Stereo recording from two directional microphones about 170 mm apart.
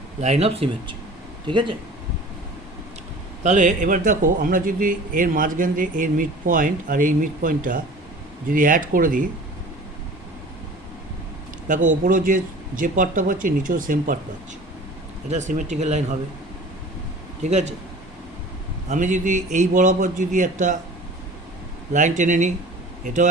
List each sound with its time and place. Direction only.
0.2 s speech: 40° right (ahead or behind)
3.4 s speech: 45° right (ahead or behind)
11.7 s speech: 50° right (ahead or behind)
15.3 s speech: 45° right (ahead or behind)
17.4 s speech: 40° right (ahead or behind)
18.9 s speech: 45° right (ahead or behind)
21.9 s speech: 50° right (ahead or behind)